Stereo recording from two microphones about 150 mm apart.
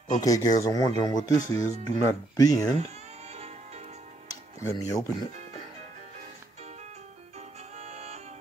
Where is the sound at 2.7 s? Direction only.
45° right (ahead or behind).